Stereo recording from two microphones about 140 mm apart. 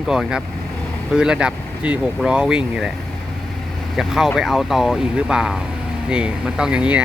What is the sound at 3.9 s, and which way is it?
Speech, 5° right (ahead or behind).